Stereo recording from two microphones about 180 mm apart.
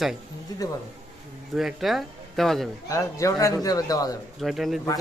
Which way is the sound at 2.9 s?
20° left (ahead or behind).